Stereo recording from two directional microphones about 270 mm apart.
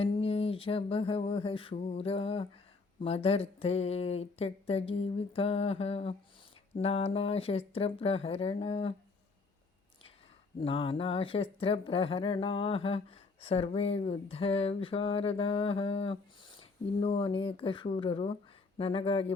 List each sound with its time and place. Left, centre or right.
0.0 s speech: centre
10.6 s speech: centre